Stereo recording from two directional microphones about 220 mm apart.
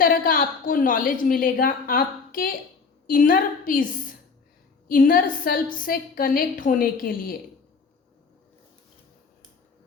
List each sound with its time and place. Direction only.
0.0 s a woman's voice: 40° left (ahead or behind)